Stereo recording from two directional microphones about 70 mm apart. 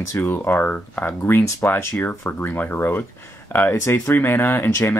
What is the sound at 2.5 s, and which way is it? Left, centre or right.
Speech, left.